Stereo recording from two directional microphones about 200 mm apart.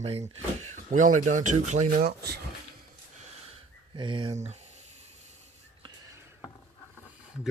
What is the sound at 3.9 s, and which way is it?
Speech, 25° right (ahead or behind).